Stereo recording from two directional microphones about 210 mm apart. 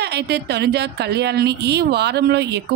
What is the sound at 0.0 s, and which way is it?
A woman's voice, 50° right (ahead or behind).